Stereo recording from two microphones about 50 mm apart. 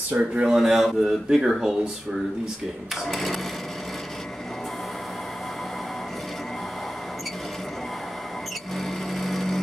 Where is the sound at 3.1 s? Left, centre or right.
Centre.